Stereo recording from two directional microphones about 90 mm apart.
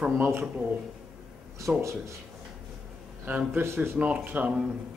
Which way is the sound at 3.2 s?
20° right (ahead or behind).